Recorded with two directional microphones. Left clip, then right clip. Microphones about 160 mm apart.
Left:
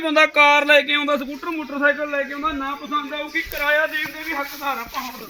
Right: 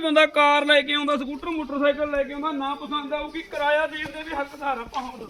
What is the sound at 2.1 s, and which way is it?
Speech, 25° right (ahead or behind).